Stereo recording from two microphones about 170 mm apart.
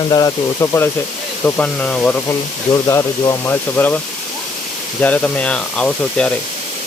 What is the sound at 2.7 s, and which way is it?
Speech, 20° left (ahead or behind).